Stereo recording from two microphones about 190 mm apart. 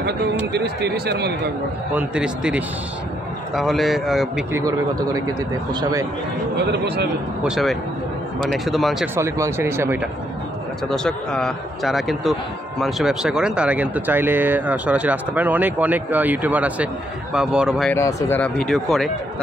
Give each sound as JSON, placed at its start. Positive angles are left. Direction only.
{"t": 0.5, "sound": "speech", "side_deg": -60}
{"t": 2.0, "sound": "speech", "side_deg": -5}
{"t": 4.5, "sound": "speech", "side_deg": -15}
{"t": 6.7, "sound": "speech", "side_deg": -65}
{"t": 7.4, "sound": "speech", "side_deg": 0}
{"t": 9.1, "sound": "speech", "side_deg": -15}
{"t": 10.9, "sound": "speech", "side_deg": 5}
{"t": 17.9, "sound": "speech", "side_deg": 10}